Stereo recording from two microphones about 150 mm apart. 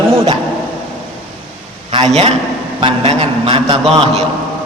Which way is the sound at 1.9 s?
40° right (ahead or behind).